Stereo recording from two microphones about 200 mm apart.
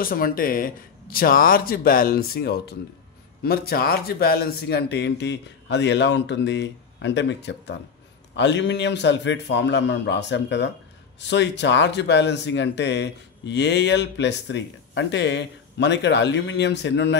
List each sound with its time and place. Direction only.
0.0 s speech: 45° left (ahead or behind); by 17.2 s 60° left (ahead or behind)